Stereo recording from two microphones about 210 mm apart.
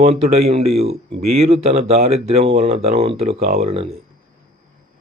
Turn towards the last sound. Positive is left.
turn(degrees=-30)  # may be behind; listen again after turning